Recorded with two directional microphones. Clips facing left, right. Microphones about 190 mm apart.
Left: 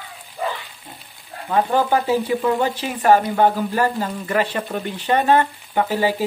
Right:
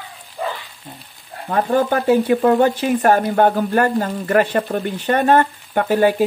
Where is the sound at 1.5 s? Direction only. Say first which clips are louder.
Right 1 dB; 55° right (ahead or behind).